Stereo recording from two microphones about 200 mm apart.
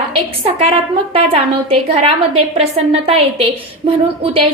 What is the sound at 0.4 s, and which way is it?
A woman's voice, 30° right (ahead or behind).